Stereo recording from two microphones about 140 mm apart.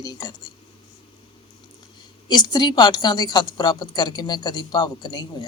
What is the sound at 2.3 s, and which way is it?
A woman's voice, 30° left (ahead or behind).